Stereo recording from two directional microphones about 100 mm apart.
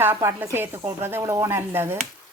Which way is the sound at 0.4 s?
20° right (ahead or behind).